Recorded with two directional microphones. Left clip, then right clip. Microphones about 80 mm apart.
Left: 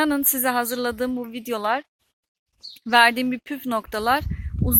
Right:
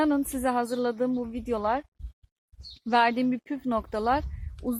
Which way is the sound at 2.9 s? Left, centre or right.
Left.